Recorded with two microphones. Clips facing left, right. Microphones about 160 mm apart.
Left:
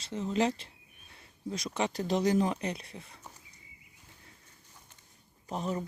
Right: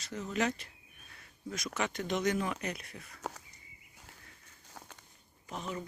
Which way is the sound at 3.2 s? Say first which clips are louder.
Right 10 dB; 90° right.